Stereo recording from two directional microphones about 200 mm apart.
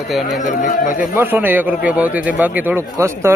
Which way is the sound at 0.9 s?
10° right (ahead or behind).